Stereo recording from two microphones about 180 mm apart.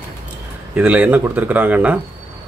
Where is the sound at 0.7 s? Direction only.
10° right (ahead or behind).